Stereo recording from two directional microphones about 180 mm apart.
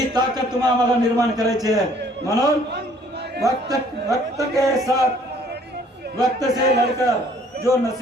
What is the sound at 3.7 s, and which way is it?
Speech, 20° right (ahead or behind).